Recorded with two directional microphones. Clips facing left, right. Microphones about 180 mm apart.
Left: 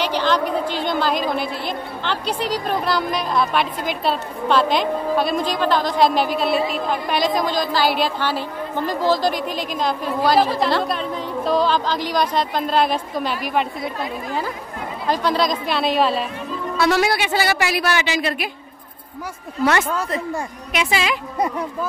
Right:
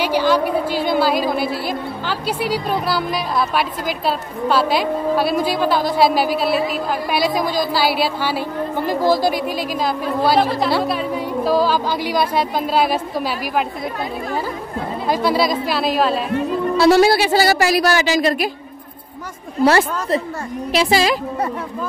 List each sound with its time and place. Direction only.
0.0 s a woman's voice: 10° right (ahead or behind)
15.0 s speech: 10° right (ahead or behind)
16.7 s speech: 30° right (ahead or behind)
19.6 s speech: 30° right (ahead or behind)